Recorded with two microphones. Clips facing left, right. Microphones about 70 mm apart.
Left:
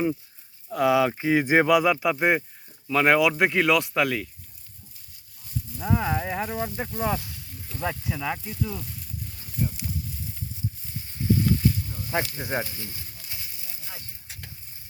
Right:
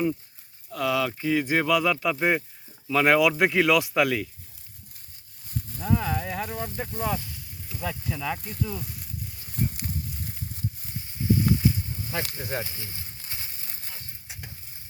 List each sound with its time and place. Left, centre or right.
0.7 s speech: left; by 4.3 s centre
5.7 s speech: centre
11.4 s a sound: centre
12.4 s speech: left
12.6 s frying: right
14.3 s stir: centre